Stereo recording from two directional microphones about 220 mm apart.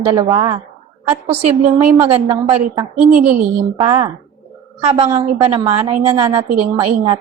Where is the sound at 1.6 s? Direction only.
35° right (ahead or behind).